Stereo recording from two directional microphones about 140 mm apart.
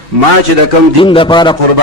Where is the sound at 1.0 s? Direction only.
40° left (ahead or behind).